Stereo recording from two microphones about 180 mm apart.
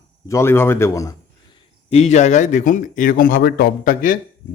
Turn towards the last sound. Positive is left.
turn(degrees=50)  # may be behind; listen again after turning